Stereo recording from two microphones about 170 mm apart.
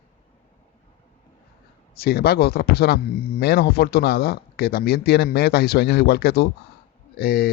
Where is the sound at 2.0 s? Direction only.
65° left (ahead or behind).